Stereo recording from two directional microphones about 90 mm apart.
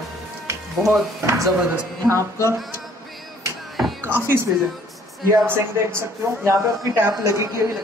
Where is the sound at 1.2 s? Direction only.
35° right (ahead or behind).